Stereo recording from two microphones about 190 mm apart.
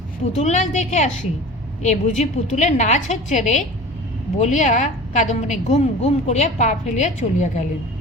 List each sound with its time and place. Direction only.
0.3 s a woman's voice: 40° left (ahead or behind)